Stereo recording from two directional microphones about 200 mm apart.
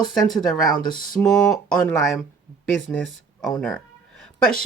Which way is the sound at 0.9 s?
45° left (ahead or behind).